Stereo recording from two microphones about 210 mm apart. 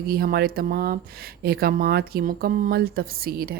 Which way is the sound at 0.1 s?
45° right (ahead or behind).